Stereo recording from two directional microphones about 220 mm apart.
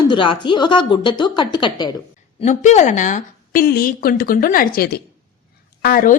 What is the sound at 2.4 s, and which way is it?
A woman's voice, 35° left (ahead or behind).